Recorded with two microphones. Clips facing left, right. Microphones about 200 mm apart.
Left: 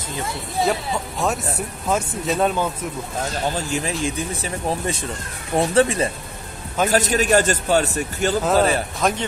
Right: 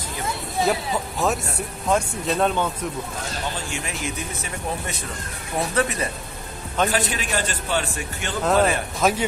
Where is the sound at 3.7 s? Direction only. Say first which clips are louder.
Left 6 dB; 30° left (ahead or behind).